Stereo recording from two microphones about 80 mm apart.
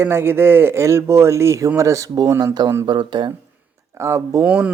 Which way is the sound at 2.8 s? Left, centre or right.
Right.